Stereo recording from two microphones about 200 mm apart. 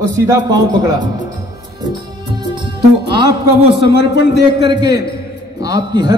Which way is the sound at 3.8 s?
60° left (ahead or behind).